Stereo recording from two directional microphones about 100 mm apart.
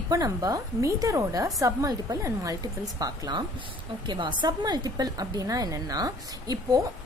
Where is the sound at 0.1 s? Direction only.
35° right (ahead or behind).